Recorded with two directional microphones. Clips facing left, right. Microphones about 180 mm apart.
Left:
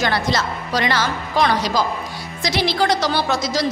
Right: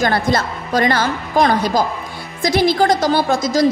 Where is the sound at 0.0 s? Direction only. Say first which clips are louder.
Right 4 dB; 50° right (ahead or behind).